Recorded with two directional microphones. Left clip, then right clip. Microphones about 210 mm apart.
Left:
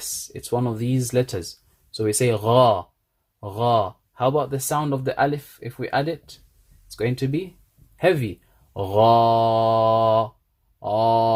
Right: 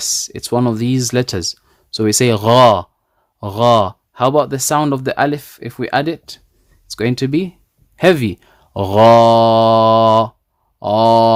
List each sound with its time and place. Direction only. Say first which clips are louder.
0.3 s speech: right 6 dB; 40° right (ahead or behind)